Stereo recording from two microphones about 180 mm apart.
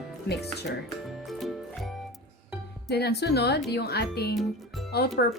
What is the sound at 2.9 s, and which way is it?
A woman's voice, 65° left (ahead or behind).